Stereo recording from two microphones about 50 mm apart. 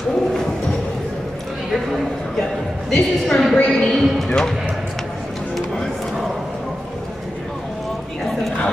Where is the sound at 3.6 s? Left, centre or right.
Centre.